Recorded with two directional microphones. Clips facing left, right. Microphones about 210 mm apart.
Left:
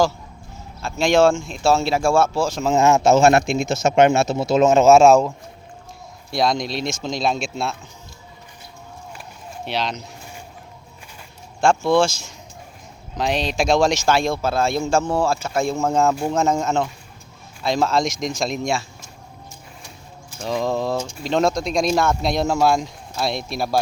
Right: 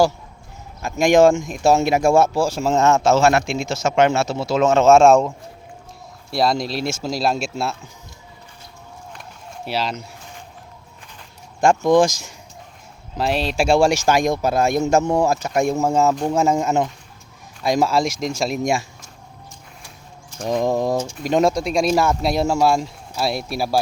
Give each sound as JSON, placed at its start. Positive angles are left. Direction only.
{"t": 0.8, "sound": "speech", "side_deg": -15}
{"t": 2.7, "sound": "a man's voice", "side_deg": 10}
{"t": 3.3, "sound": "speech", "side_deg": 50}
{"t": 3.8, "sound": "a man's voice", "side_deg": 20}
{"t": 4.8, "sound": "speech", "side_deg": 5}
{"t": 6.3, "sound": "speech", "side_deg": -5}
{"t": 9.6, "sound": "speech", "side_deg": -5}
{"t": 11.6, "sound": "speech", "side_deg": -15}
{"t": 13.1, "sound": "speech", "side_deg": -5}
{"t": 20.4, "sound": "speech", "side_deg": -15}